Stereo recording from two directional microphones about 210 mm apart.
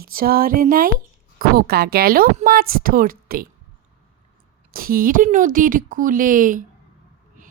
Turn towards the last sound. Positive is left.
turn(degrees=-40)  # may be behind; listen again after turning